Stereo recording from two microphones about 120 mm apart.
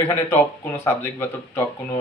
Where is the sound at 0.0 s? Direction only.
20° left (ahead or behind).